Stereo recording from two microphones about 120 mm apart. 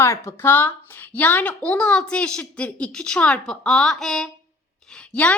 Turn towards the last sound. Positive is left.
turn(degrees=10)  # may be behind; listen again after turning